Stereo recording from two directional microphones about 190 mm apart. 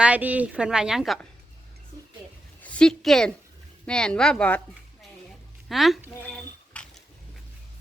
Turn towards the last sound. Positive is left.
turn(degrees=5)  # may be behind; listen again after turning